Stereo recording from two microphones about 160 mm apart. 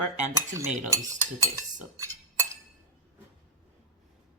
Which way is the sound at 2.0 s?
15° right (ahead or behind).